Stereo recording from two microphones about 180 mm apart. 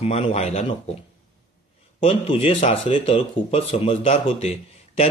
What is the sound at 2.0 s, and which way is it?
Speech, 30° left (ahead or behind).